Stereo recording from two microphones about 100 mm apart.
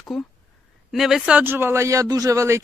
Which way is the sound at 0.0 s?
Centre (ahead or behind).